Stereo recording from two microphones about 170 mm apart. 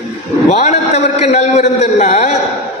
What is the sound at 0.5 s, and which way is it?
A man's voice, 40° left (ahead or behind).